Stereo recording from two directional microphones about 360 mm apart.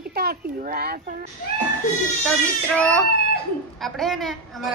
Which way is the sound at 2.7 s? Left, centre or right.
Centre.